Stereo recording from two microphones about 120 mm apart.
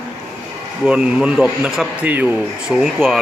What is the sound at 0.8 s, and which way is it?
A man's voice, 10° right (ahead or behind).